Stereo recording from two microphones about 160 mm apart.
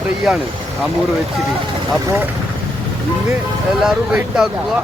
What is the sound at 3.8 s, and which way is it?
Speech, centre (ahead or behind).